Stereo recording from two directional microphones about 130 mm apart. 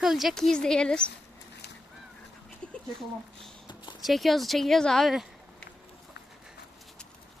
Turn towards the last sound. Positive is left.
turn(degrees=0)  # may be behind; listen again after turning